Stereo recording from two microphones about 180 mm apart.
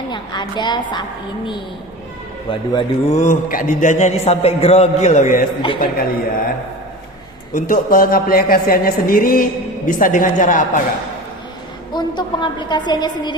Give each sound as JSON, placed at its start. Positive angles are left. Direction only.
{"t": 0.1, "sound": "a woman's voice", "side_deg": 25}
{"t": 2.5, "sound": "a woman's voice", "side_deg": 30}
{"t": 3.2, "sound": "a man's voice", "side_deg": 45}
{"t": 7.5, "sound": "speech", "side_deg": 50}
{"t": 11.9, "sound": "a woman's voice", "side_deg": 25}